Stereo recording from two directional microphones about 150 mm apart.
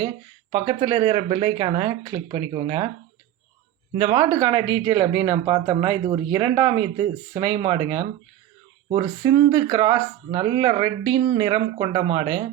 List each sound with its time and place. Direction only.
0.5 s speech: 30° right (ahead or behind)
3.9 s speech: 35° right (ahead or behind)